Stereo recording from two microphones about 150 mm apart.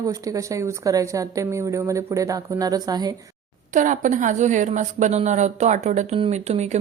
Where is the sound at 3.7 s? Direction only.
60° right (ahead or behind).